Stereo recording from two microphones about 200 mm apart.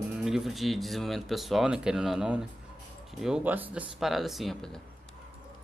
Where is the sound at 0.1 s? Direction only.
Centre (ahead or behind).